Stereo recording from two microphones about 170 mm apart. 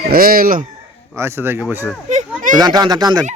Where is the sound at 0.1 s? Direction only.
60° right (ahead or behind).